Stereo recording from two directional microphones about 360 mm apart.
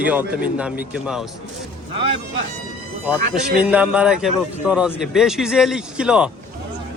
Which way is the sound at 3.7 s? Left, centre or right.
Centre.